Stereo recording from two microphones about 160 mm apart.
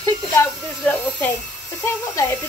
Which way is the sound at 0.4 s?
10° left (ahead or behind).